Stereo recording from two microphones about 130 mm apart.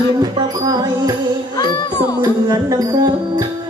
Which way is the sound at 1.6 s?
35° left (ahead or behind).